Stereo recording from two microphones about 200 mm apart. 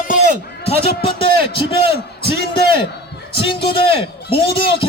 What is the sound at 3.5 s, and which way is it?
A man's voice, 25° left (ahead or behind).